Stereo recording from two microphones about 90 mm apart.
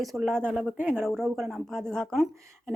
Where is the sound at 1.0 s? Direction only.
5° left (ahead or behind).